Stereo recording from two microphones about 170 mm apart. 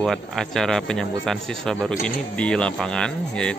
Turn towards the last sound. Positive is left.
turn(degrees=5)  # may be behind; listen again after turning